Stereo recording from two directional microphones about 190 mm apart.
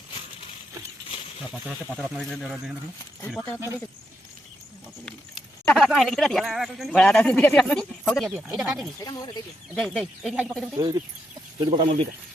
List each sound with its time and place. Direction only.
1.5 s speech: centre (ahead or behind)
5.6 s speech: centre (ahead or behind)
9.0 s speech: 20° left (ahead or behind)
9.7 s speech: 5° left (ahead or behind)
10.8 s speech: 20° right (ahead or behind)